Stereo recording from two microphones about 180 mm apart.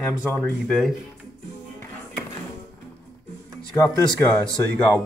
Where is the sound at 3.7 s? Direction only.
15° left (ahead or behind).